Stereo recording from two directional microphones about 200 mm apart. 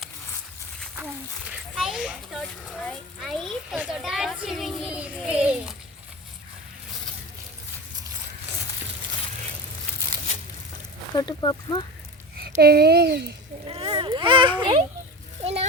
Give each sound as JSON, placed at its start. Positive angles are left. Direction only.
{"t": 1.7, "sound": "a child's voice", "side_deg": 0}
{"t": 11.1, "sound": "speech", "side_deg": 20}
{"t": 12.4, "sound": "speech", "side_deg": -50}
{"t": 13.7, "sound": "a child's voice", "side_deg": -25}